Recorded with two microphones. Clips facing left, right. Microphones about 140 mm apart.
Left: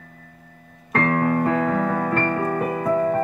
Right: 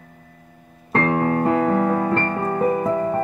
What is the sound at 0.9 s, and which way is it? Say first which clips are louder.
Piano: right 1 dB; 25° right (ahead or behind).